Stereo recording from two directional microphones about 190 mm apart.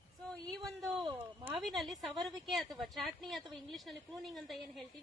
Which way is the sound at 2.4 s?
Centre (ahead or behind).